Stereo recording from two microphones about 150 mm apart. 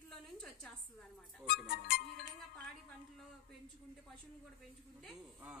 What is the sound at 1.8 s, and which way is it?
Music, 70° left (ahead or behind).